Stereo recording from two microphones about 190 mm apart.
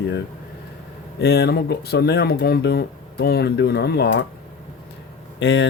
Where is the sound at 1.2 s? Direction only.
60° left (ahead or behind).